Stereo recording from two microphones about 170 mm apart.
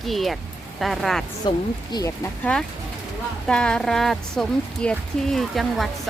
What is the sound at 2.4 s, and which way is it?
Speech, 5° left (ahead or behind).